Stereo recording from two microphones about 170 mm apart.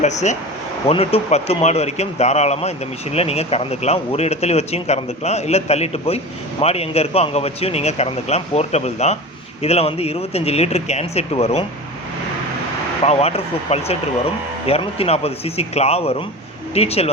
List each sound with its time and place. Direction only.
0.0 s speech: 45° left (ahead or behind)
13.1 s speech: 35° left (ahead or behind)